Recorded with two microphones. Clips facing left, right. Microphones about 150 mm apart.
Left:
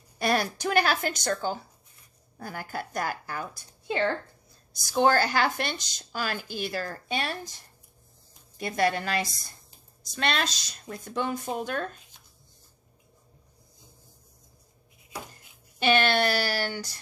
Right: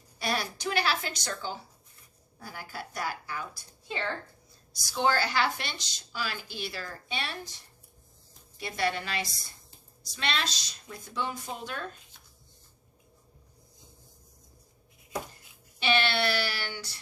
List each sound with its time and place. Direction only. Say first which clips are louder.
0.2 s speech: left 6 dB; 50° left (ahead or behind)
8.5 s speech: left 5 dB; 45° left (ahead or behind)
15.8 s speech: left 4 dB; 50° left (ahead or behind)